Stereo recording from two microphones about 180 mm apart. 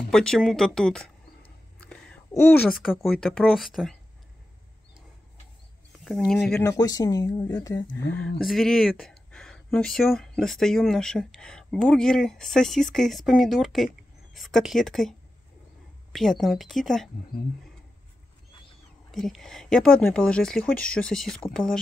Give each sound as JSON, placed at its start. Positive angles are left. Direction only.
{"t": 0.1, "sound": "speech", "side_deg": 5}
{"t": 1.8, "sound": "a sound", "side_deg": 5}
{"t": 2.7, "sound": "speech", "side_deg": 0}
{"t": 6.0, "sound": "speech", "side_deg": 0}
{"t": 6.6, "sound": "speech", "side_deg": 20}
{"t": 8.5, "sound": "speech", "side_deg": 0}
{"t": 19.1, "sound": "speech", "side_deg": 0}